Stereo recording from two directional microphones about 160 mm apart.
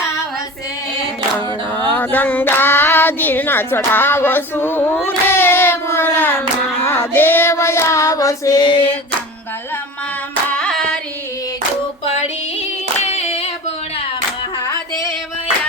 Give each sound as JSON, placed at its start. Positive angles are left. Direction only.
{"t": 1.9, "sound": "child singing", "side_deg": 10}
{"t": 10.5, "sound": "a sound", "side_deg": 5}
{"t": 13.0, "sound": "female singing", "side_deg": 45}
{"t": 14.6, "sound": "music", "side_deg": 20}